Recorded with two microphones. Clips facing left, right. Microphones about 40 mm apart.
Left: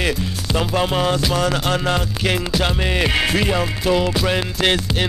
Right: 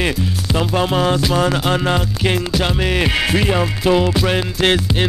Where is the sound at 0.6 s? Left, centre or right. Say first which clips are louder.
Right 2 dB; centre.